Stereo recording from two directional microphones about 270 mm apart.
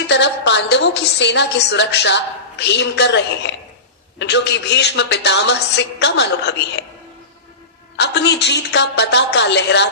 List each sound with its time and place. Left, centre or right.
0.1 s a woman's voice: left
7.9 s a woman's voice: left